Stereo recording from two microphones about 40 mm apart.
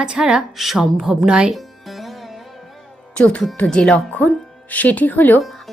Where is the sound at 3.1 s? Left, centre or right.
Left.